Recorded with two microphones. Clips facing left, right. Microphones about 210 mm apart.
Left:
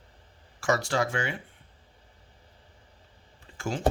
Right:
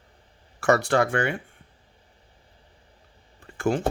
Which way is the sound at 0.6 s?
60° right (ahead or behind).